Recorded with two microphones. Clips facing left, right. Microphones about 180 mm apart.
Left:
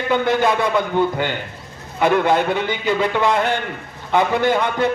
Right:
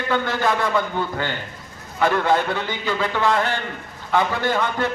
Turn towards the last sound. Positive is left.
turn(degrees=15)  # may be behind; listen again after turning